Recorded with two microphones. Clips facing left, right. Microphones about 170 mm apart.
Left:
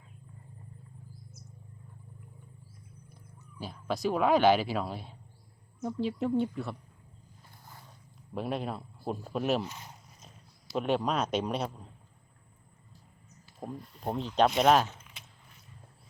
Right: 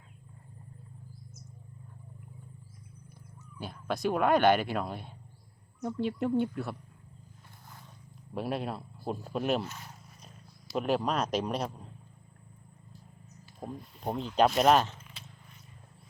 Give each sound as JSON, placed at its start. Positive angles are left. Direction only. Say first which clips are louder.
{"t": 3.6, "sound": "speech", "louder": "even", "side_deg": 0}
{"t": 8.4, "sound": "speech", "louder": "even", "side_deg": 0}
{"t": 9.6, "sound": "speech", "louder": "even", "side_deg": 15}
{"t": 10.7, "sound": "speech", "louder": "even", "side_deg": 0}
{"t": 13.6, "sound": "speech", "louder": "even", "side_deg": 0}